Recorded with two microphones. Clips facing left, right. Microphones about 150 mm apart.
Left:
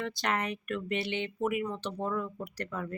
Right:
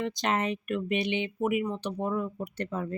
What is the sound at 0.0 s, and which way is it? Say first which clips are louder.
Speech: right 4 dB; 20° right (ahead or behind).